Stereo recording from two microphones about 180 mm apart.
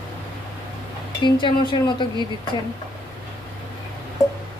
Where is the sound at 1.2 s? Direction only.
25° left (ahead or behind).